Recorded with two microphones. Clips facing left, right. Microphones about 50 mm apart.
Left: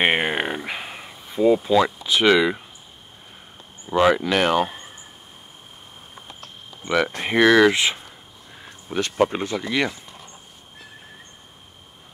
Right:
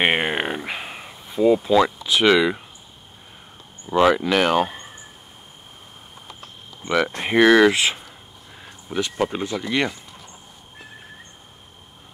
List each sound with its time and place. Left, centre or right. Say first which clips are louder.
0.0 s a sound: even; centre
2.1 s speech: even; centre
3.8 s speech: right 1 dB; centre
7.2 s speech: right 1 dB; centre
8.5 s a sound: even; centre
9.1 s speech: left 6 dB; centre
9.6 s speech: right 1 dB; centre